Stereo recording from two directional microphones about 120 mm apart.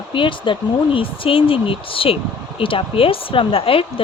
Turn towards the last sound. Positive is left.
turn(degrees=50)  # may be behind; listen again after turning